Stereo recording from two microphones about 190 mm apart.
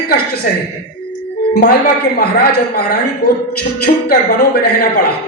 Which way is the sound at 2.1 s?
55° left (ahead or behind).